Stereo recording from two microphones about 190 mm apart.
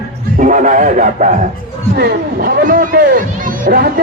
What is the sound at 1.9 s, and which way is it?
Speech, 55° right (ahead or behind).